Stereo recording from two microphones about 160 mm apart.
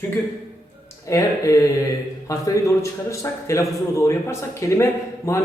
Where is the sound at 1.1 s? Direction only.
20° left (ahead or behind).